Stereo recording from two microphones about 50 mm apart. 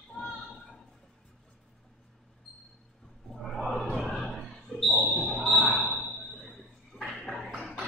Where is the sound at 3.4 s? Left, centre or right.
Centre.